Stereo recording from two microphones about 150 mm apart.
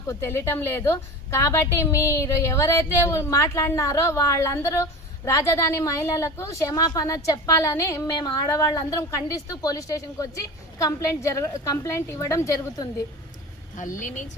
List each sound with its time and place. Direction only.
0.1 s a woman's voice: 20° left (ahead or behind)
13.7 s a woman's voice: 60° left (ahead or behind)